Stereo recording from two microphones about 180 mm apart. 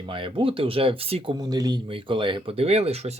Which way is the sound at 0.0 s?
30° right (ahead or behind).